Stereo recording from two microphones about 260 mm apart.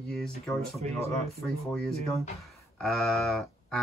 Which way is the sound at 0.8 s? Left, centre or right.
Right.